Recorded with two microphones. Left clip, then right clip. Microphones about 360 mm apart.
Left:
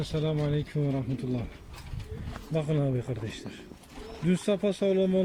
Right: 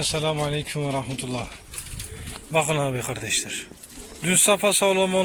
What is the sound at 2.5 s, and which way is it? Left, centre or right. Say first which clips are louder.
A man's voice: right 8 dB; right.